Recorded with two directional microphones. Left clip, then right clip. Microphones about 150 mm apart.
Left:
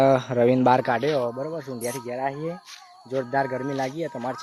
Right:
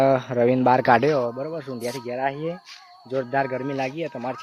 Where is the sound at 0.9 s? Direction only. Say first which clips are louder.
Right 6 dB; 75° right (ahead or behind).